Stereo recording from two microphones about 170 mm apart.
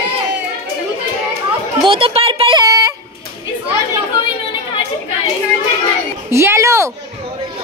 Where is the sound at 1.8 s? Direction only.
30° right (ahead or behind).